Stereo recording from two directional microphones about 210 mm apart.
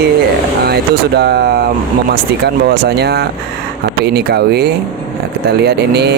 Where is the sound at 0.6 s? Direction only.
50° right (ahead or behind).